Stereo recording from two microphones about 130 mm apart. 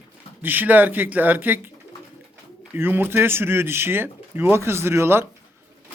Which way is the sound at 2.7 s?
15° right (ahead or behind).